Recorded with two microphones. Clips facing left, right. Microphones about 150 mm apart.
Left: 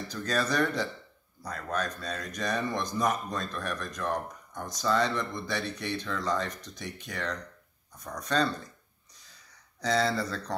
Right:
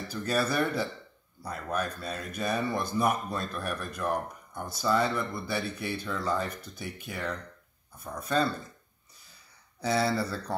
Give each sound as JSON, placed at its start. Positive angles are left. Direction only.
{"t": 0.1, "sound": "a man's voice", "side_deg": -10}
{"t": 9.8, "sound": "a man's voice", "side_deg": -5}